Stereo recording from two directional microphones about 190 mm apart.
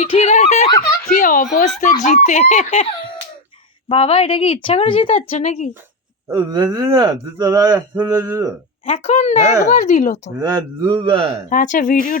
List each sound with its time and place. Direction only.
0.0 s speech: 30° left (ahead or behind)
1.0 s speech: 45° left (ahead or behind)
6.2 s speech: 20° right (ahead or behind)
8.8 s speech: 35° left (ahead or behind)
10.5 s a man's voice: 20° right (ahead or behind)
11.4 s speech: 45° left (ahead or behind)